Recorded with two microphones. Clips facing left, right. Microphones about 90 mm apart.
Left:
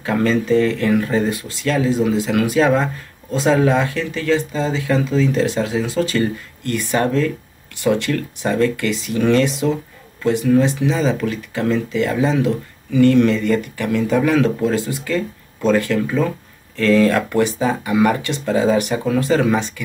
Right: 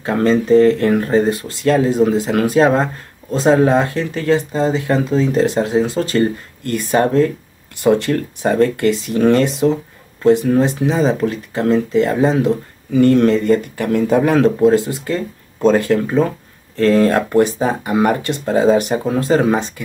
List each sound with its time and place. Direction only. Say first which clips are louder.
0.0 s speech: right 3 dB; 35° right (ahead or behind)